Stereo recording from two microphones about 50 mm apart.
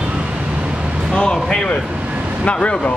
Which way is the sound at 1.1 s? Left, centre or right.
Centre.